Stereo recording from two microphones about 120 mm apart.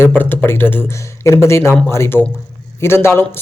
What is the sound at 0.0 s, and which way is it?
A man's voice, 15° left (ahead or behind).